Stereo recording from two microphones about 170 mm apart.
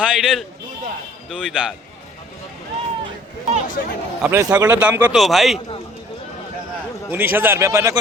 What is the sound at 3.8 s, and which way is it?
Speech, 60° left (ahead or behind).